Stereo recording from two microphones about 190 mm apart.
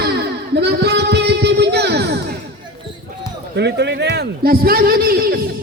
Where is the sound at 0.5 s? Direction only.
60° right (ahead or behind).